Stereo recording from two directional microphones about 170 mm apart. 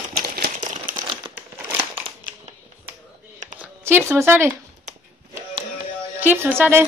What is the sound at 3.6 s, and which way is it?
Speech, 15° right (ahead or behind).